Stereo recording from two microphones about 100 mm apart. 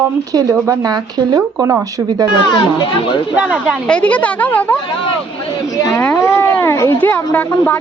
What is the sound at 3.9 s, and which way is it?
Speech, 15° left (ahead or behind).